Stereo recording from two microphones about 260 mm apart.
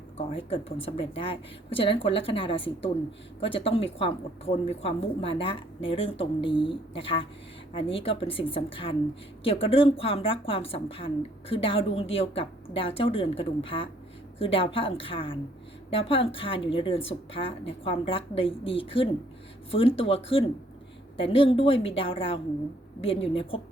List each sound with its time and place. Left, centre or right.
0.2 s a woman's voice: left